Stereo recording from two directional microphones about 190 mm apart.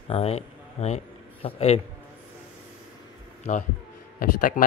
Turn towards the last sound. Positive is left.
turn(degrees=45)  # may be behind; listen again after turning